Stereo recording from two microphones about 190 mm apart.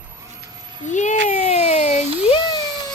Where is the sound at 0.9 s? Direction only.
40° left (ahead or behind).